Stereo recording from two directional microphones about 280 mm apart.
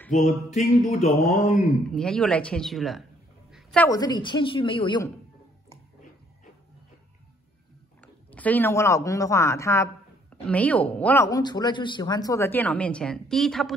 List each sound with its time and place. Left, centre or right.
0.1 s mantra: left
1.9 s a woman's voice: centre
8.0 s speech: centre